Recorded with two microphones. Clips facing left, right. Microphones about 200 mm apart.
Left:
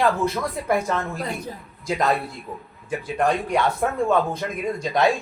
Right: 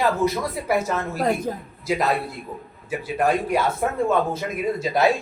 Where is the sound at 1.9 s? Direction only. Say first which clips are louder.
Even; 5° right (ahead or behind).